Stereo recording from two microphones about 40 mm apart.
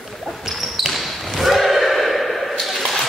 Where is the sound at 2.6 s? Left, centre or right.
Centre.